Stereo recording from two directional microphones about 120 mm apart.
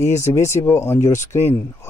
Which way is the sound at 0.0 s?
25° left (ahead or behind).